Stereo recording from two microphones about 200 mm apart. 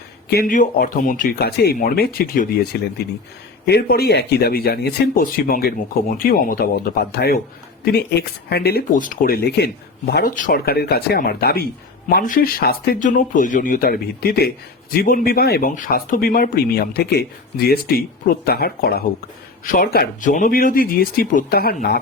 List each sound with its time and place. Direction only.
0.3 s speech: 45° left (ahead or behind)